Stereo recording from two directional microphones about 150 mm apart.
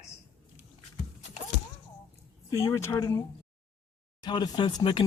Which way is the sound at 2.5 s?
20° left (ahead or behind).